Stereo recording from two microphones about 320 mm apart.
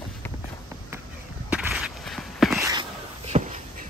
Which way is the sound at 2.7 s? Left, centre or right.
Centre.